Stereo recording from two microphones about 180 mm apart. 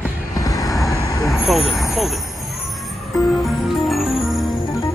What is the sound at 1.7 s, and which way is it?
Speech, centre (ahead or behind).